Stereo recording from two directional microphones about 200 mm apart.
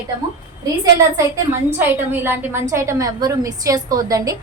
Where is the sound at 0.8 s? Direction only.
15° right (ahead or behind).